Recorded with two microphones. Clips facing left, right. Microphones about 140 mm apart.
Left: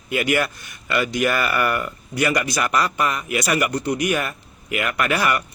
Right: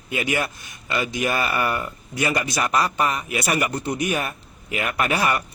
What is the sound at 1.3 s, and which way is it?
Speech, 25° right (ahead or behind).